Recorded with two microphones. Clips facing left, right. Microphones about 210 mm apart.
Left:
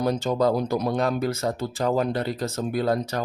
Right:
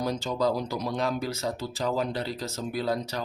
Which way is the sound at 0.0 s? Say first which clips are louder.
Left 5 dB; 55° left (ahead or behind).